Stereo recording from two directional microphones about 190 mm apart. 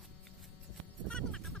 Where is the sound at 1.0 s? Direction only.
5° left (ahead or behind).